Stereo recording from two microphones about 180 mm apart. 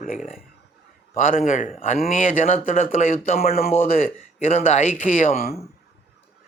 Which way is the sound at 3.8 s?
50° left (ahead or behind).